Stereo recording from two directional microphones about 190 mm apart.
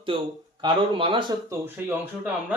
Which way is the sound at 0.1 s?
30° right (ahead or behind).